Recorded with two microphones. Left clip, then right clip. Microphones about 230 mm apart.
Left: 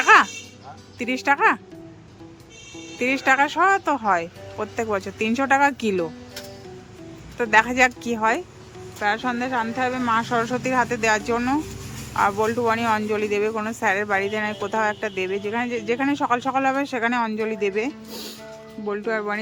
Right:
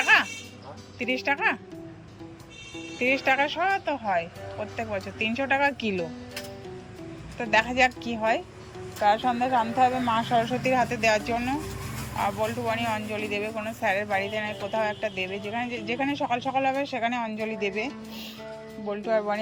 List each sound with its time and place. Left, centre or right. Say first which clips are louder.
0.0 s music: left 6 dB; centre
0.9 s speech: left 5 dB; centre
3.0 s speech: left 4 dB; centre
7.3 s speech: left 5 dB; centre